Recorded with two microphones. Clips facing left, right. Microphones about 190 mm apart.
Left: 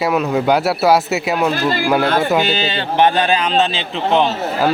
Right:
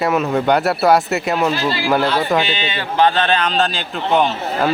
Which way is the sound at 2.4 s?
40° left (ahead or behind).